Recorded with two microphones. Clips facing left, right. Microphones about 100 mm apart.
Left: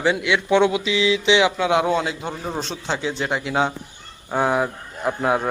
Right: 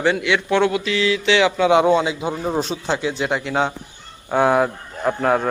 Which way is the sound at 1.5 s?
Centre (ahead or behind).